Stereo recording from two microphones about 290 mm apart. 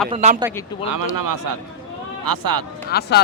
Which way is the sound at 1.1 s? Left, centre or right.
Right.